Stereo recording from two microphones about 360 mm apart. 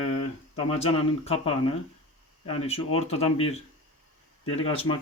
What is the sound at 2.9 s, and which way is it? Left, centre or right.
Speech, centre.